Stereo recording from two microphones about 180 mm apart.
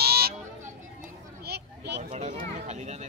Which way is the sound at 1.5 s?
70° right (ahead or behind).